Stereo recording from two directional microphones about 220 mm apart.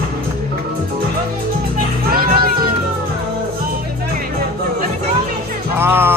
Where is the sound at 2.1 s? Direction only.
40° right (ahead or behind).